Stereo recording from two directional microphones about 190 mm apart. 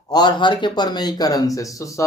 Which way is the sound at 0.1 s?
20° left (ahead or behind).